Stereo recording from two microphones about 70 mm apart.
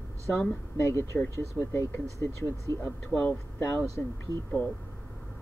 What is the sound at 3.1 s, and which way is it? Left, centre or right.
Speech, centre.